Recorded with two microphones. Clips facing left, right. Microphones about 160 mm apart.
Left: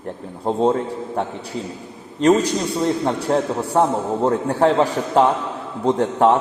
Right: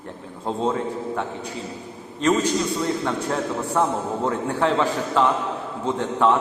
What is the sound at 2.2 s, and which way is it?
A man's voice, 35° left (ahead or behind).